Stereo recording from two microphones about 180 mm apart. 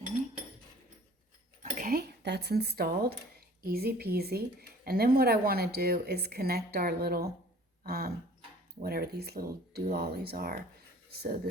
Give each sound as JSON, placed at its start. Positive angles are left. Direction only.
{"t": 1.8, "sound": "a woman's voice", "side_deg": -60}